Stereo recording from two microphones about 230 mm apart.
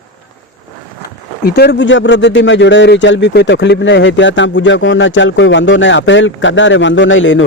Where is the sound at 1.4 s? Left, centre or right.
Left.